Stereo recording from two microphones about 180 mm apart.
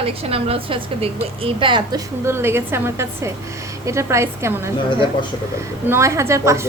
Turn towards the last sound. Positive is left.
turn(degrees=-15)  # may be behind; listen again after turning